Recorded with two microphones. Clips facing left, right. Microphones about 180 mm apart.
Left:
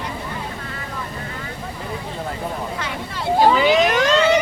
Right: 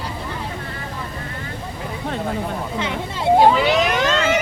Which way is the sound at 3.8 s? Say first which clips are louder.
Left 3 dB; 40° left (ahead or behind).